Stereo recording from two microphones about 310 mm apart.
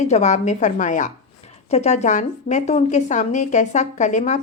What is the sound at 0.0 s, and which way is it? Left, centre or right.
A woman's voice, left.